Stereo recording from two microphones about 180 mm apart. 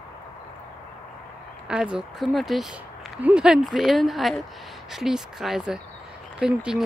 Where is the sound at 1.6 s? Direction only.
5° right (ahead or behind).